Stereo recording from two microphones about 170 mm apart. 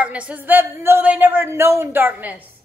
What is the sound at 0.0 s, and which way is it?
A woman's voice, 5° right (ahead or behind).